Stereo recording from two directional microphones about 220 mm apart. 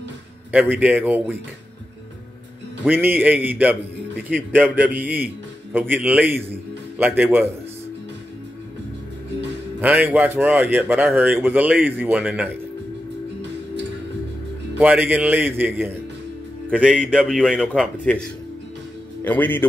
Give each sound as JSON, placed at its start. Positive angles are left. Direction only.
{"t": 0.5, "sound": "speech", "side_deg": -5}
{"t": 2.8, "sound": "speech", "side_deg": -10}
{"t": 9.8, "sound": "speech", "side_deg": -10}
{"t": 14.8, "sound": "speech", "side_deg": -10}
{"t": 17.0, "sound": "speech", "side_deg": 0}
{"t": 19.2, "sound": "a man's voice", "side_deg": 10}